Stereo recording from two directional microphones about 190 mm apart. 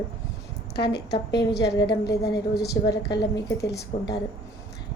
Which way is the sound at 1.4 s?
20° left (ahead or behind).